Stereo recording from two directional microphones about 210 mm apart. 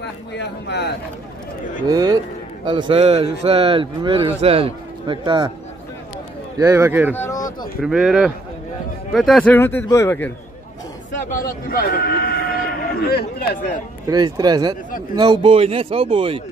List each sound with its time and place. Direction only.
0.0 s speech: 55° left (ahead or behind)
1.9 s speech: 20° right (ahead or behind)
6.6 s speech: 15° right (ahead or behind)
7.2 s a sound: 15° left (ahead or behind)
7.8 s speech: 5° right (ahead or behind)
11.7 s speech: 45° left (ahead or behind)
14.0 s speech: 20° right (ahead or behind)